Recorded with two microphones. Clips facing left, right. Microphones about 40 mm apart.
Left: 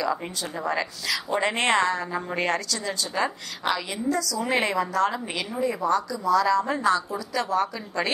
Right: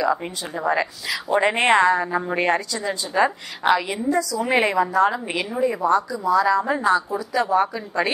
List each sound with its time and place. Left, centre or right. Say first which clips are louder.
0.0 s speech: right 5 dB; centre